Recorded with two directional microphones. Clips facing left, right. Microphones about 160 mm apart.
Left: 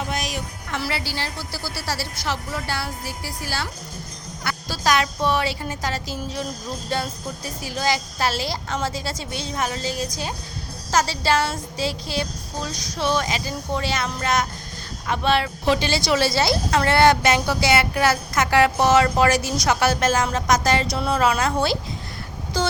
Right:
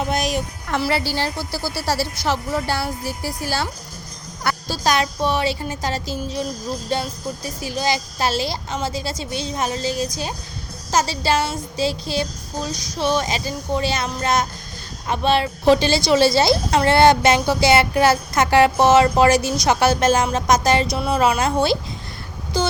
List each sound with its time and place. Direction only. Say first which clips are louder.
0.1 s a woman's voice: right 6 dB; 45° right (ahead or behind); by 6.4 s 25° right (ahead or behind)
7.6 s a woman's voice: right 1 dB; 25° right (ahead or behind)
15.6 s a woman's voice: right 10 dB; 35° right (ahead or behind)